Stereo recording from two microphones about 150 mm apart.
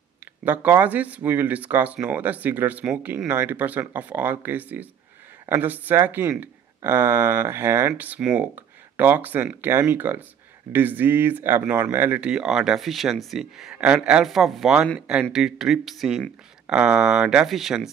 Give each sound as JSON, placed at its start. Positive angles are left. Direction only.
{"t": 0.5, "sound": "speech", "side_deg": -10}